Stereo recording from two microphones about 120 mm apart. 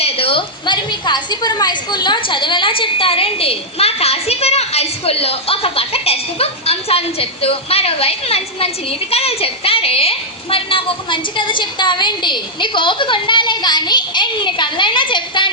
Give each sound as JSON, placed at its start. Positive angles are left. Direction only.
{"t": 0.0, "sound": "a woman's voice", "side_deg": 55}